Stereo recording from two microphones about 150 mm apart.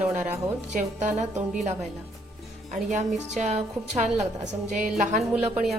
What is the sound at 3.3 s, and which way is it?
A woman's voice, 50° right (ahead or behind).